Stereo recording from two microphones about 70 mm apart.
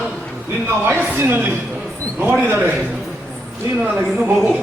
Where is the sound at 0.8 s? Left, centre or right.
Right.